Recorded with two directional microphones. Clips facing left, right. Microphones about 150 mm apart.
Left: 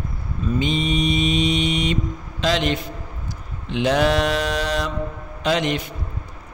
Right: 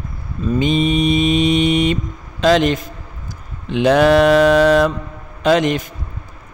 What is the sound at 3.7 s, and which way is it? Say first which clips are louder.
Mantra: right 7 dB; 55° right (ahead or behind).